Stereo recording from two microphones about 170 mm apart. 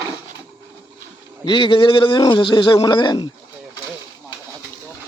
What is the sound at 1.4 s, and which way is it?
A man's voice, 25° left (ahead or behind).